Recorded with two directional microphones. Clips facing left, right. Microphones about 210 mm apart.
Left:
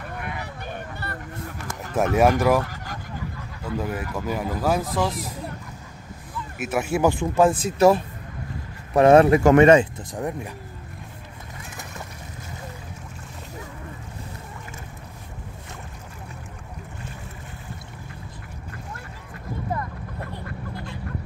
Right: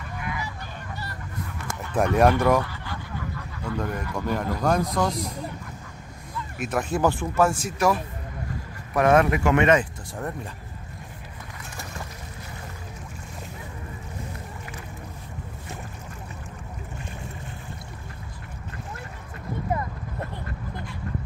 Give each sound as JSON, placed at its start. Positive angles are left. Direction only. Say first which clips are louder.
{"t": 0.2, "sound": "a sound", "louder": "right 4 dB", "side_deg": 60}
{"t": 2.0, "sound": "speech", "louder": "left 1 dB", "side_deg": 5}
{"t": 3.6, "sound": "speech", "louder": "left 1 dB", "side_deg": 5}
{"t": 6.6, "sound": "speech", "louder": "left 2 dB", "side_deg": 10}
{"t": 8.9, "sound": "speech", "louder": "left 5 dB", "side_deg": 30}
{"t": 10.1, "sound": "speech", "louder": "left 4 dB", "side_deg": 15}